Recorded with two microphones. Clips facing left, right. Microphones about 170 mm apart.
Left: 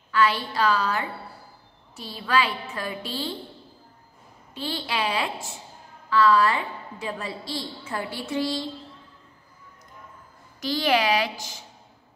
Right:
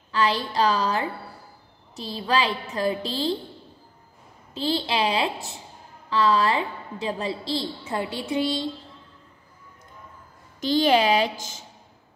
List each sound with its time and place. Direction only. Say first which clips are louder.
0.1 s a woman's voice: even; 30° right (ahead or behind)
2.0 s a woman's voice: right 1 dB; 30° right (ahead or behind)
4.7 s a woman's voice: right 2 dB; 20° right (ahead or behind)
7.8 s a woman's voice: right 3 dB; 20° right (ahead or behind)
10.6 s a woman's voice: right 4 dB; 25° right (ahead or behind)